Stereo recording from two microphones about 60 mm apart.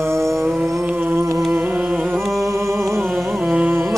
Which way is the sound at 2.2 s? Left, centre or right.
Centre.